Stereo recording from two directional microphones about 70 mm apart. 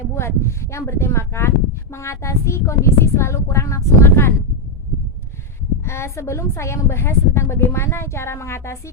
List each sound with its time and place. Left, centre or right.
0.1 s speech: left
5.8 s speech: left